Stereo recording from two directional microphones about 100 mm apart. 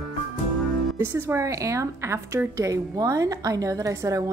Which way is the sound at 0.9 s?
25° right (ahead or behind).